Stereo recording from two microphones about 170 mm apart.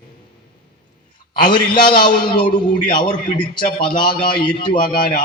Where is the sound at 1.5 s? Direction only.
25° left (ahead or behind).